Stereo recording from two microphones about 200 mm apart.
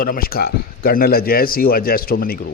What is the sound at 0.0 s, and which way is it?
A man's voice, 45° left (ahead or behind).